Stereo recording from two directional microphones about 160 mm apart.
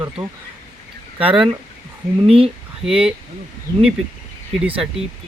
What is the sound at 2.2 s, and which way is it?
Speech, 40° right (ahead or behind).